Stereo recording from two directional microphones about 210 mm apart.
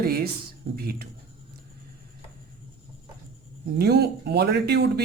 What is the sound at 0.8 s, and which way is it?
Speech, 45° right (ahead or behind).